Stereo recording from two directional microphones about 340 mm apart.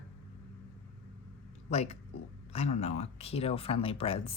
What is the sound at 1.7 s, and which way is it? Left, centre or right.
Speech, centre.